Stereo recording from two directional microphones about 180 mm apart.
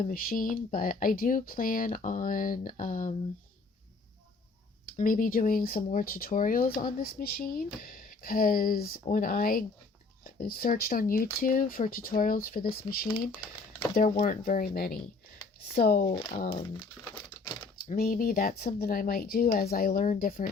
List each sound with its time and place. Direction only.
0.0 s speech: 50° left (ahead or behind)
4.9 s speech: 50° left (ahead or behind)
14.3 s speech: 50° left (ahead or behind)
16.5 s speech: 25° left (ahead or behind)
17.9 s speech: 55° left (ahead or behind)